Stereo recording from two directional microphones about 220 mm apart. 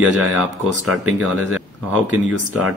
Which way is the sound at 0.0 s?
Centre (ahead or behind).